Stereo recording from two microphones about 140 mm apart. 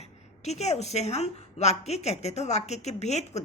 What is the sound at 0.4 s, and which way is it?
A woman's voice, 50° left (ahead or behind).